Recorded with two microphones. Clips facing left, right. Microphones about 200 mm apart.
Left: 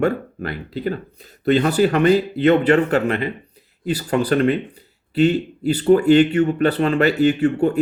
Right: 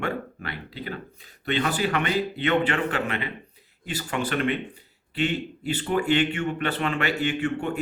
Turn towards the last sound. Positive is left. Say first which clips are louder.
# left 9 dB
turn(degrees=35)  # may be behind; listen again after turning